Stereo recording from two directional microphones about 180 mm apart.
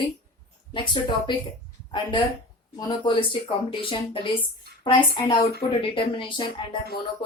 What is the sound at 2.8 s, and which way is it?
Speech, 25° left (ahead or behind).